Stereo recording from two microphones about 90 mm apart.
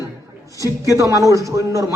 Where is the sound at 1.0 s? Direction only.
35° right (ahead or behind).